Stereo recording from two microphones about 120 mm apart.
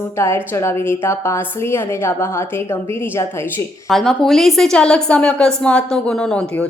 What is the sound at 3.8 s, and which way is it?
A woman's voice, centre (ahead or behind).